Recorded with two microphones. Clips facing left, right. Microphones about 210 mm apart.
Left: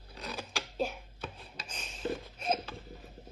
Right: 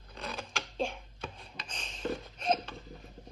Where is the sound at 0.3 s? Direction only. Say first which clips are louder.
Even; centre (ahead or behind).